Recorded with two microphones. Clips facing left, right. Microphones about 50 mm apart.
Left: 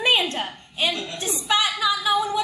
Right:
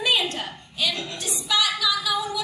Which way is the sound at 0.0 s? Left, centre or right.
Left.